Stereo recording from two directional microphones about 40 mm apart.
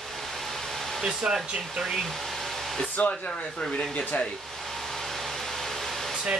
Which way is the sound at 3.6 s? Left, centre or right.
Centre.